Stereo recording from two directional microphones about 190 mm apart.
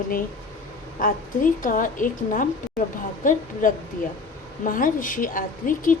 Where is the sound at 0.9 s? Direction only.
45° left (ahead or behind).